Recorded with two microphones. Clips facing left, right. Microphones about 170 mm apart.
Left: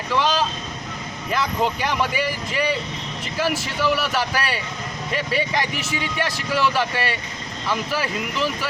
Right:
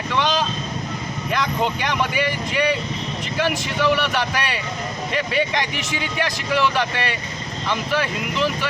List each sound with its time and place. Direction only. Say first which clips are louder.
0.1 s boat: left 1 dB; 5° left (ahead or behind)
1.3 s speech: even; centre (ahead or behind)